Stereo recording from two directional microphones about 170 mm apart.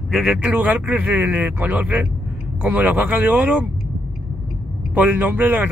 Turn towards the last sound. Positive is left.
turn(degrees=-10)  # may be behind; listen again after turning